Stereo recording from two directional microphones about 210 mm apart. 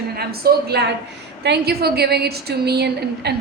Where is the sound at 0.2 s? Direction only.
50° right (ahead or behind).